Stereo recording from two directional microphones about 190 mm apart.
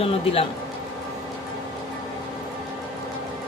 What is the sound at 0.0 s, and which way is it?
Speech, 30° left (ahead or behind).